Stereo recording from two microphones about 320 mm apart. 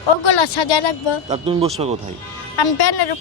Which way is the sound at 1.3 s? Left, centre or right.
Centre.